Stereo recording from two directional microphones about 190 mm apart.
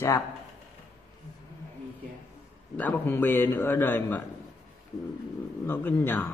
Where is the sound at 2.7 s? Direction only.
10° left (ahead or behind).